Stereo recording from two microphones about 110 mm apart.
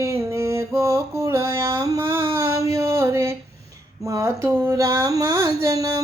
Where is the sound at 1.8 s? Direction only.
25° right (ahead or behind).